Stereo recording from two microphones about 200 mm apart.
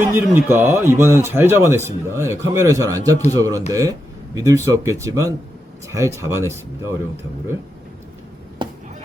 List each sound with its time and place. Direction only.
0.1 s a man's voice: 10° right (ahead or behind)
8.6 s chop: 25° right (ahead or behind)